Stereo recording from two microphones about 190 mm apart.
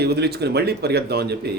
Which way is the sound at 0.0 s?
60° right (ahead or behind).